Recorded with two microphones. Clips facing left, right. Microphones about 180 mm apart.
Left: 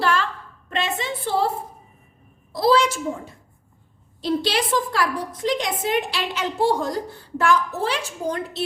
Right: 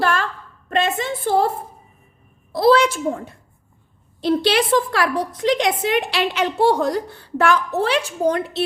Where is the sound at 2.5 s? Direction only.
60° right (ahead or behind).